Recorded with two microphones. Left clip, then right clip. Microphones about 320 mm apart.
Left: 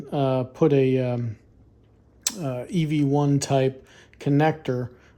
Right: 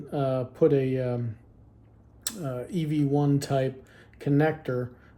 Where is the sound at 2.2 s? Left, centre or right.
Centre.